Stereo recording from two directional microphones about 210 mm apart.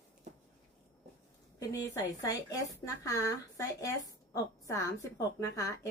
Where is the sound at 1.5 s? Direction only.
15° left (ahead or behind).